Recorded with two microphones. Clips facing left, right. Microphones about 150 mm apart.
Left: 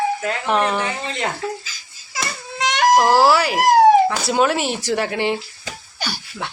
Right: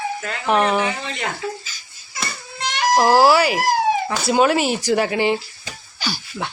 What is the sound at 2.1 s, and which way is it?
Baby cry, 85° left.